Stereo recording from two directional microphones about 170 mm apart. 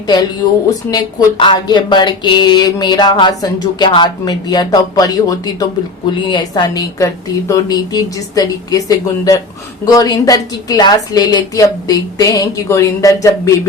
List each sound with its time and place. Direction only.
0.9 s speech: 25° left (ahead or behind)